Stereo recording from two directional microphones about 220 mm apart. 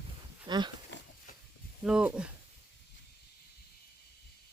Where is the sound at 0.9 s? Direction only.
50° left (ahead or behind).